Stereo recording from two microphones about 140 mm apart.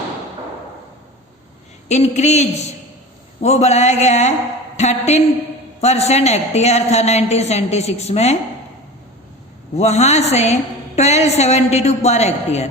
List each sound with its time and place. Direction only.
1.9 s a woman's voice: 55° left (ahead or behind)
9.7 s a woman's voice: 50° left (ahead or behind)